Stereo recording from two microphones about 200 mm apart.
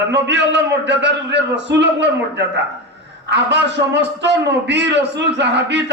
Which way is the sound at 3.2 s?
60° right (ahead or behind).